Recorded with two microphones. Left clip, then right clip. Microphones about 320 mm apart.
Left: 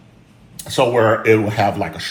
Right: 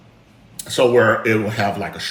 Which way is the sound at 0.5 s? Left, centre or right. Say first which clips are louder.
Right 1 dB; centre.